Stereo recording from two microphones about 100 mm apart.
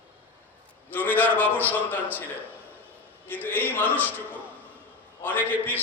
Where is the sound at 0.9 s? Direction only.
15° left (ahead or behind).